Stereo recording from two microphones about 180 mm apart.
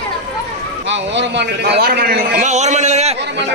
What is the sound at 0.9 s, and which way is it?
A man's voice, 70° right (ahead or behind).